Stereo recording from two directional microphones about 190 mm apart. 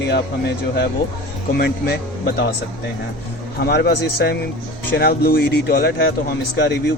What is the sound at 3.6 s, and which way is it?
Speech, 55° left (ahead or behind).